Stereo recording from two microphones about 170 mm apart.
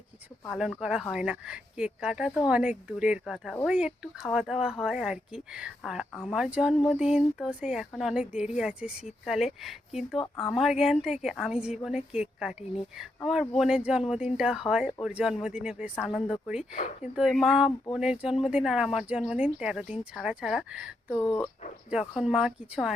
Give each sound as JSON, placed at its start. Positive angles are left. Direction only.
{"t": 0.5, "sound": "speech", "side_deg": -5}
{"t": 21.2, "sound": "speech", "side_deg": 25}
{"t": 21.8, "sound": "speech", "side_deg": -5}